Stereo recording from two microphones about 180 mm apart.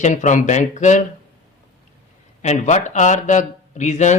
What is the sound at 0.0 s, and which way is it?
Speech, 40° left (ahead or behind).